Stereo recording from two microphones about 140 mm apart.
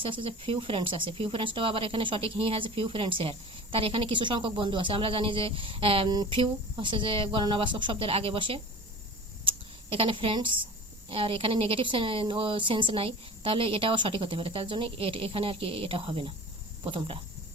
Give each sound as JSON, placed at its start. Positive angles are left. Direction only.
{"t": 0.0, "sound": "speech", "side_deg": -40}
{"t": 9.4, "sound": "a sound", "side_deg": -40}
{"t": 11.1, "sound": "speech", "side_deg": -40}